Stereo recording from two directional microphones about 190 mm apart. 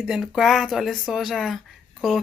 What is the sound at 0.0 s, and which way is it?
Speech, centre (ahead or behind).